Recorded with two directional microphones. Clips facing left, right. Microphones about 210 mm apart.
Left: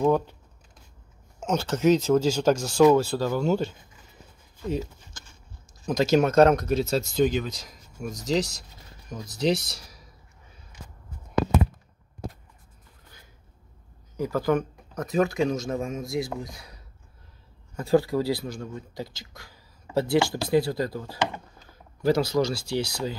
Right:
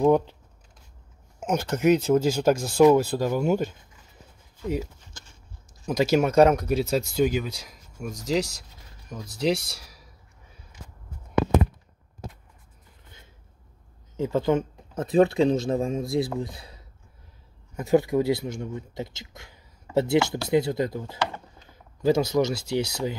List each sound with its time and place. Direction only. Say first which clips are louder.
0.0 s speech: right 3 dB; 15° right (ahead or behind)
1.4 s speech: even; 10° right (ahead or behind)
5.9 s speech: even; 10° right (ahead or behind)
14.1 s speech: right 1 dB; 25° right (ahead or behind)
17.7 s a man's voice: right 1 dB; 20° right (ahead or behind)